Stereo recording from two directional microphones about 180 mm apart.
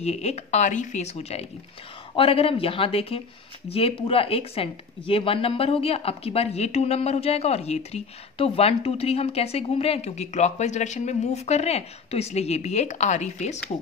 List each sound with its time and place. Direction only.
0.0 s speech: 35° left (ahead or behind)